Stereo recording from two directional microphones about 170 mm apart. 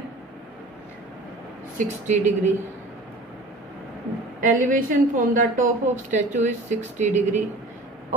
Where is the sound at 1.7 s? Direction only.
45° right (ahead or behind).